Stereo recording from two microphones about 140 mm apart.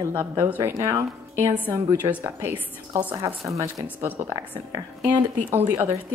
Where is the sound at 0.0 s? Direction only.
15° right (ahead or behind).